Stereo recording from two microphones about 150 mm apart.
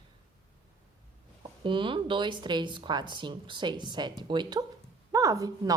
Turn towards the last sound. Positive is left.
turn(degrees=-25)  # may be behind; listen again after turning